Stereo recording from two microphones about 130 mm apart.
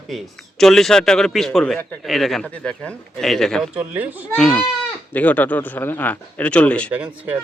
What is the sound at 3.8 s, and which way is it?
Speech, 15° right (ahead or behind).